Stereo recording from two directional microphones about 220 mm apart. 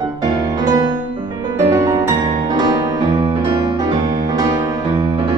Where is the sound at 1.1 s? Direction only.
20° right (ahead or behind).